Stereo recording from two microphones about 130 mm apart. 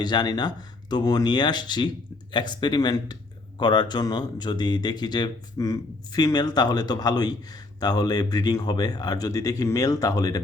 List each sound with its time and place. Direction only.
0.0 s speech: 35° left (ahead or behind)